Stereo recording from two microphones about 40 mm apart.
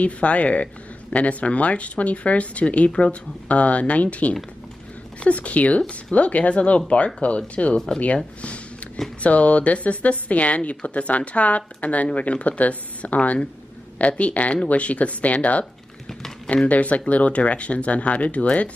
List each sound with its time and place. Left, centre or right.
0.0 s speech: left
9.2 s speech: left
16.6 s speech: left